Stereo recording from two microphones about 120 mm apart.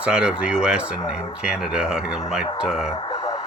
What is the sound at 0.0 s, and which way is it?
Speech, 10° right (ahead or behind).